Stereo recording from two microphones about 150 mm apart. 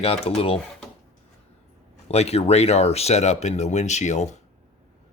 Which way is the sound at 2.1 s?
45° left (ahead or behind).